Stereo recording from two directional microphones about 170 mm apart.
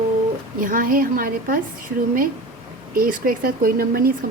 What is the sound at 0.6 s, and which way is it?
Speech, 55° right (ahead or behind).